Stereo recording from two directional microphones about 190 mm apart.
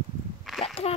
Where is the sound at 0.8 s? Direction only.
30° left (ahead or behind).